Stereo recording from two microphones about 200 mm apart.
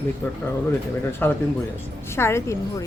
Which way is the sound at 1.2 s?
10° left (ahead or behind).